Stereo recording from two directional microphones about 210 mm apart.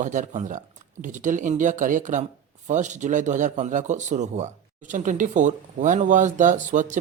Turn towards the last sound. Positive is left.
turn(degrees=-35)  # may be behind; listen again after turning